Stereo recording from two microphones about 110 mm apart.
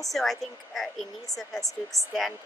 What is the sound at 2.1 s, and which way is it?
Speech, centre (ahead or behind).